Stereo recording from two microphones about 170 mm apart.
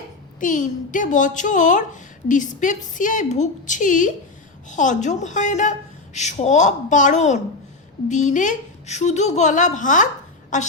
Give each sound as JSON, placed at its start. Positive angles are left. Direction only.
{"t": 0.3, "sound": "a woman's voice", "side_deg": 50}